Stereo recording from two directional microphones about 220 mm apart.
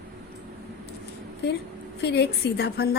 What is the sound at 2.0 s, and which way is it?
Speech, 50° left (ahead or behind).